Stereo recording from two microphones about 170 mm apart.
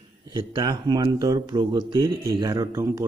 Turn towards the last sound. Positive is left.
turn(degrees=-20)  # may be behind; listen again after turning